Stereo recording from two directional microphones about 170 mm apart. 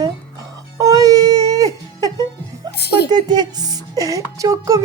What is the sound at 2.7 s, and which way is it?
Speech, 75° left (ahead or behind).